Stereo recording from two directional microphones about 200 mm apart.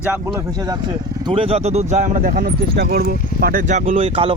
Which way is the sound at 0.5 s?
20° right (ahead or behind).